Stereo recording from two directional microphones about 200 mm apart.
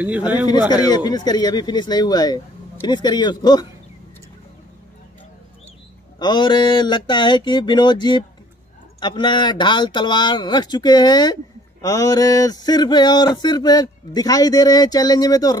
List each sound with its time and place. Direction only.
0.7 s speech: 20° left (ahead or behind)
6.1 s speech: 20° left (ahead or behind)